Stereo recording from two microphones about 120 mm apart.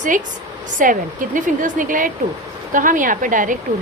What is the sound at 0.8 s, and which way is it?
A woman's voice, 90° right.